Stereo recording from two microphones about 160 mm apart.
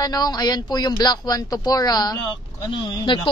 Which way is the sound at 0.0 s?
25° left (ahead or behind).